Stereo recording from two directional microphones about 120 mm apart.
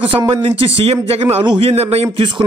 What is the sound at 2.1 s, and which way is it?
Speech, 40° right (ahead or behind).